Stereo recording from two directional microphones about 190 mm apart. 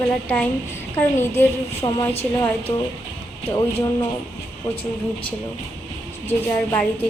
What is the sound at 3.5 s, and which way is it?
Speech, 15° left (ahead or behind).